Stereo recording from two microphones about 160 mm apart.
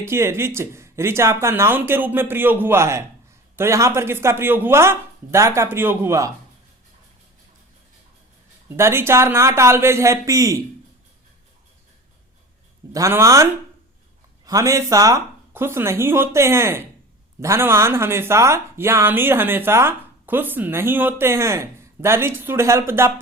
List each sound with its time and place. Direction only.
0.0 s speech: 15° right (ahead or behind)
8.7 s speech: 15° right (ahead or behind)
12.9 s speech: 20° right (ahead or behind)